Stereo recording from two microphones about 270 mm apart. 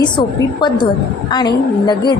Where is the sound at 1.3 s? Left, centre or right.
Centre.